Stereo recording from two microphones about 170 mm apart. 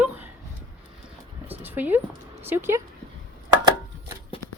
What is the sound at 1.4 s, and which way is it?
Dog, 10° right (ahead or behind).